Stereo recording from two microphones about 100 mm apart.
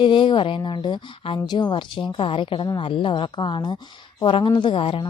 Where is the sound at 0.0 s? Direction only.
55° left (ahead or behind).